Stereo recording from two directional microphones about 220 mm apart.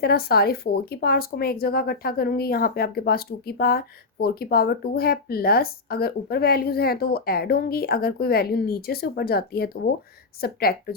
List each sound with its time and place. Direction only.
0.0 s speech: 45° left (ahead or behind)